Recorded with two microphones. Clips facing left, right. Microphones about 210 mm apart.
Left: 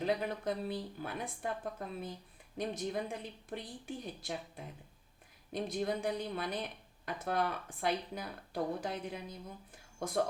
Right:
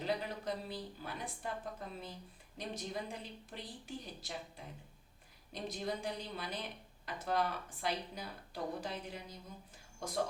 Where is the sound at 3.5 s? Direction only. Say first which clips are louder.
Left 5 dB; 55° left (ahead or behind).